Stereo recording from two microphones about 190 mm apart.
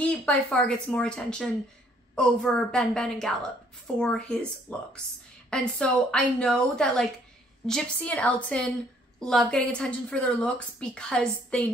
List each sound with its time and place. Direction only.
0.0 s a woman's voice: 5° left (ahead or behind)